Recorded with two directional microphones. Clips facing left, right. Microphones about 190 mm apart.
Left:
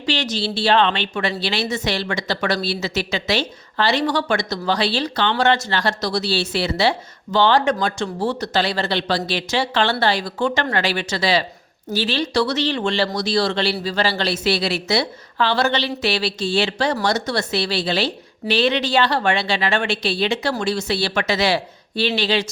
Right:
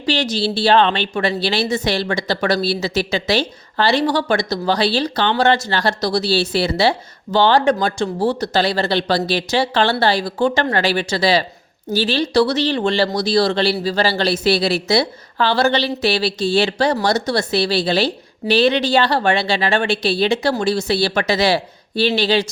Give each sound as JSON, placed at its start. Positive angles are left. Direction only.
{"t": 0.0, "sound": "speech", "side_deg": -35}